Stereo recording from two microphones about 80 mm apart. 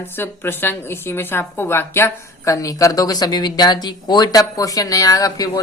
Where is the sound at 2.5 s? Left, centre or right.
Left.